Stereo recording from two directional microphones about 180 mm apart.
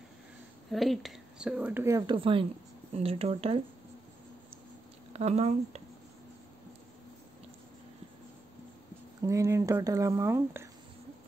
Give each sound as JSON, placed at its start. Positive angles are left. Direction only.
{"t": 0.7, "sound": "speech", "side_deg": 0}
{"t": 5.1, "sound": "speech", "side_deg": -35}
{"t": 9.2, "sound": "speech", "side_deg": -15}